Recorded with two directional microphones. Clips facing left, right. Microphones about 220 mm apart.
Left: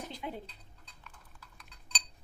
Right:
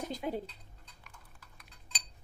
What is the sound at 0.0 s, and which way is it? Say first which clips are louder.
Dishes: right 5 dB; 45° right (ahead or behind).